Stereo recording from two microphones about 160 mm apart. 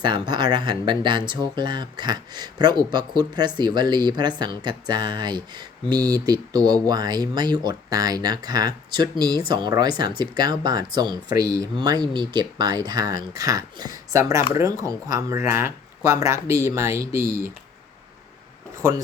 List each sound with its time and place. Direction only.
0.0 s speech: 30° right (ahead or behind)
17.2 s speech: 60° right (ahead or behind)
18.8 s speech: 20° right (ahead or behind)